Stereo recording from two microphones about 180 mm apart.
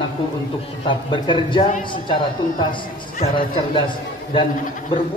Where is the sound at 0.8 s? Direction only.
25° left (ahead or behind).